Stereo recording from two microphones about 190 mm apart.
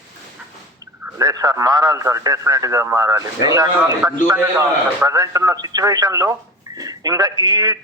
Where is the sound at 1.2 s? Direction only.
20° right (ahead or behind).